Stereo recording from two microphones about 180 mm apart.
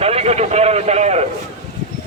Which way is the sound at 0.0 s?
35° right (ahead or behind).